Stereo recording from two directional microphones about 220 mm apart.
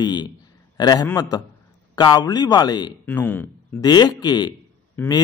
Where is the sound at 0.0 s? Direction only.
20° left (ahead or behind).